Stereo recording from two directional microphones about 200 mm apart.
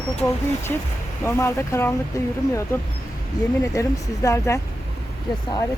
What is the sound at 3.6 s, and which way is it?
Speech, 15° left (ahead or behind).